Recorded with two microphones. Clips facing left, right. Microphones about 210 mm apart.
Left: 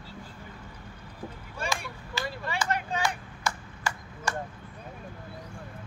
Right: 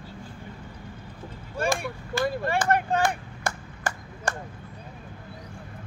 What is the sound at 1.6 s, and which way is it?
Vehicle, 55° right (ahead or behind).